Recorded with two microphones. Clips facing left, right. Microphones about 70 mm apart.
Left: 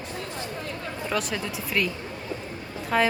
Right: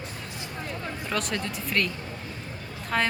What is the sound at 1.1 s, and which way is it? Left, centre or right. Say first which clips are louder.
Speech: left 1 dB; centre.